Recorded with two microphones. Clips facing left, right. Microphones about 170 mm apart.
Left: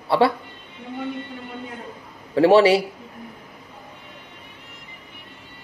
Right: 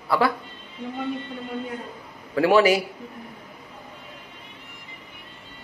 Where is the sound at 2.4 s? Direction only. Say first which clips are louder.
Left 4 dB; 30° left (ahead or behind).